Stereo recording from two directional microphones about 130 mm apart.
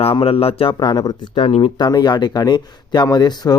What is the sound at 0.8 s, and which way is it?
Speech, 30° left (ahead or behind).